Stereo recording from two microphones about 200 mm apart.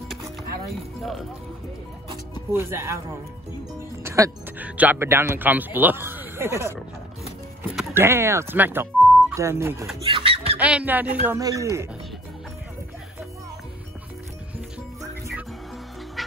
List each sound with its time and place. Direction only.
2.5 s speech: 10° right (ahead or behind)
7.9 s speech: 10° right (ahead or behind)
10.0 s a sound: 25° right (ahead or behind)
10.6 s speech: 5° right (ahead or behind)
16.2 s music: centre (ahead or behind)